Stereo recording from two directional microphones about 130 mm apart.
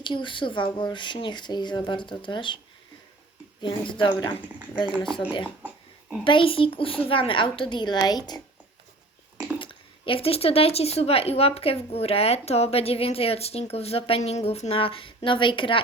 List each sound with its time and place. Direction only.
0.0 s speech: 40° left (ahead or behind)
3.6 s speech: 40° left (ahead or behind)
5.6 s a sound: 10° right (ahead or behind)
6.2 s speech: 40° left (ahead or behind)
9.6 s speech: 45° left (ahead or behind)